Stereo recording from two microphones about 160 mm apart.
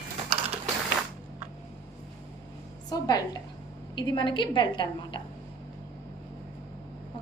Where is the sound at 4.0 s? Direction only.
30° left (ahead or behind).